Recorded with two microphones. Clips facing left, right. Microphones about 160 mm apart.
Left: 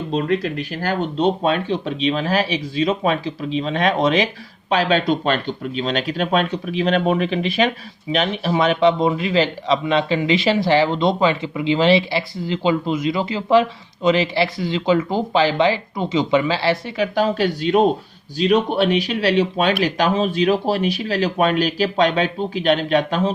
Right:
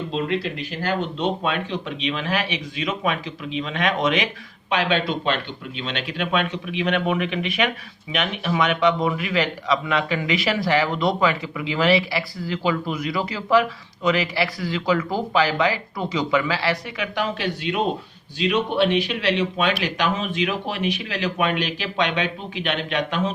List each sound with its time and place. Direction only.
0.1 s a man's voice: 45° left (ahead or behind)